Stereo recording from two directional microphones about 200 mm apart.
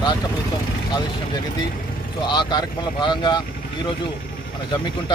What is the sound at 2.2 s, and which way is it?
A man's voice, 20° left (ahead or behind).